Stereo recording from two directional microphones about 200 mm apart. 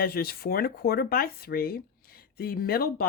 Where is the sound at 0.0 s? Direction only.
50° left (ahead or behind).